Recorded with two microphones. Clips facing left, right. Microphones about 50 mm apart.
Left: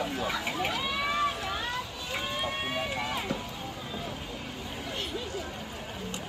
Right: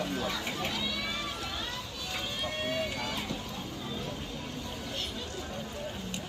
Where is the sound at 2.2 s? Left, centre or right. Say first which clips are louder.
Left 3 dB; left.